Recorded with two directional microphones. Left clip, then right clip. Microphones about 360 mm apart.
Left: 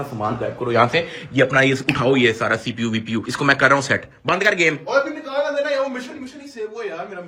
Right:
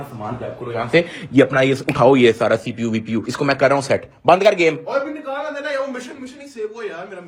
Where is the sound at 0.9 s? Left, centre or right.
Centre.